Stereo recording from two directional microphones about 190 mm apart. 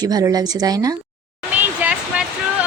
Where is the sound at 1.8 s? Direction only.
5° right (ahead or behind).